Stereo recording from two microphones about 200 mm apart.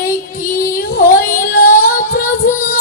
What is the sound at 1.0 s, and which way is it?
Child singing, 45° left (ahead or behind).